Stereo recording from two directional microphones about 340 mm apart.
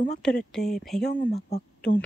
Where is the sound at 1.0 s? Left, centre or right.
Left.